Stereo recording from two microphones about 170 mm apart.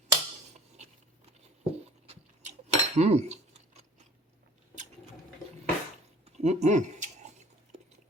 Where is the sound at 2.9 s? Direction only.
40° right (ahead or behind).